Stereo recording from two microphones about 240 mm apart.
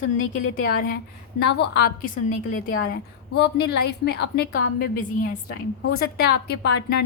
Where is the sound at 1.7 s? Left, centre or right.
Left.